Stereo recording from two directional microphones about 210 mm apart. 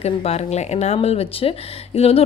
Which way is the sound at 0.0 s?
30° left (ahead or behind).